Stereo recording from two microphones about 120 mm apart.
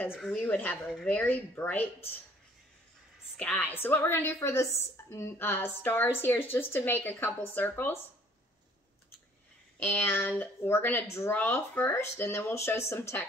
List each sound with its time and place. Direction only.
0.1 s speech: centre (ahead or behind)
0.4 s a woman's voice: 15° left (ahead or behind)
3.3 s a woman's voice: 15° left (ahead or behind)
9.8 s speech: 15° left (ahead or behind)